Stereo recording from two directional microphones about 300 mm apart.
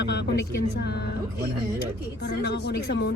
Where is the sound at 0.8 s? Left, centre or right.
Left.